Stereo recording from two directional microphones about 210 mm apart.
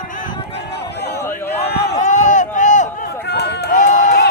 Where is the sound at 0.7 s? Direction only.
50° left (ahead or behind).